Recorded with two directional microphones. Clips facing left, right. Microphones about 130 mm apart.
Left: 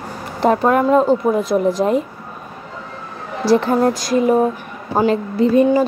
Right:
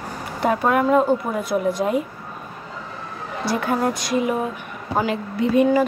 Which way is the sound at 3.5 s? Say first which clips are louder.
Left 7 dB; 30° left (ahead or behind).